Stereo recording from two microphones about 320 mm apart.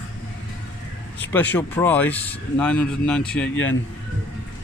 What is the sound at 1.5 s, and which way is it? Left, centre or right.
Speech, centre.